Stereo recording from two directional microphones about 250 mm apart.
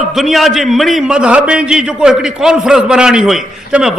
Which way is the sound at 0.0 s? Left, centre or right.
Centre.